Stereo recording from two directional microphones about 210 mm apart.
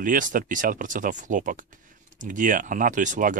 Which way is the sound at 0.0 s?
40° right (ahead or behind).